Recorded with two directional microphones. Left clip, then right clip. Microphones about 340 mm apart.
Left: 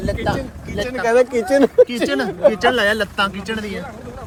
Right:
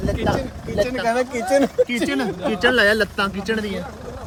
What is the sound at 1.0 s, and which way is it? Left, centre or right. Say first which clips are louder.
Speech: left 9 dB; left.